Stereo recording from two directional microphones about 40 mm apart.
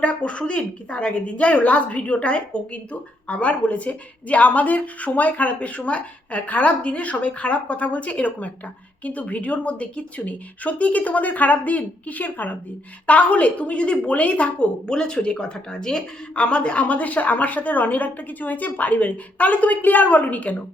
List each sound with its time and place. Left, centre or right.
0.0 s a woman's voice: left
14.8 s speech: centre
16.4 s a woman's voice: left